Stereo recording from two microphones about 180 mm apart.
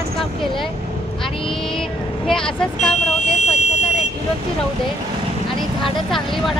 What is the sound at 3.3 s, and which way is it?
Vehicle, 40° left (ahead or behind).